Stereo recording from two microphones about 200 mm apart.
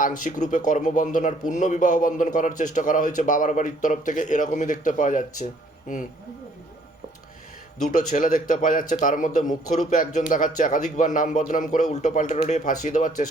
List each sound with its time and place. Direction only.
0.0 s a man's voice: 40° left (ahead or behind)
7.8 s a man's voice: 35° left (ahead or behind)